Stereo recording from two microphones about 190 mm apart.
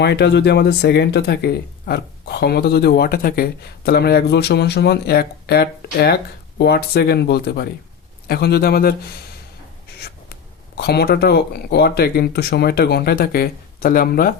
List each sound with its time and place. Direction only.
0.0 s speech: 60° left (ahead or behind)
10.8 s speech: 60° left (ahead or behind)